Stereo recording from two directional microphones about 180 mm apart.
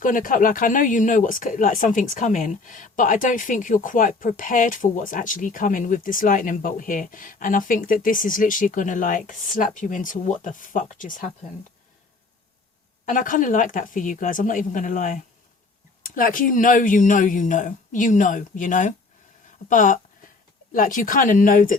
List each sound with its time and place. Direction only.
0.0 s speech: 50° left (ahead or behind)
13.1 s speech: 45° left (ahead or behind)